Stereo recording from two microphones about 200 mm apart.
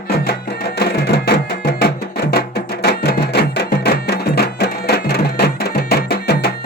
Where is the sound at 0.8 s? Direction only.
55° left (ahead or behind).